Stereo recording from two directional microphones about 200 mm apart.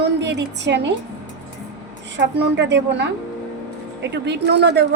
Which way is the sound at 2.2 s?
60° right (ahead or behind).